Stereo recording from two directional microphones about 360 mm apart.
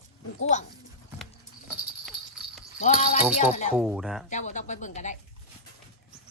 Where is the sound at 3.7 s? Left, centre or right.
Centre.